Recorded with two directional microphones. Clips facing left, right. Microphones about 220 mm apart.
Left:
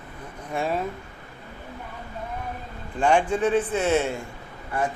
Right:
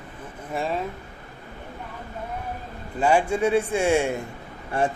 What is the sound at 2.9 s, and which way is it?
A man's voice, 5° right (ahead or behind).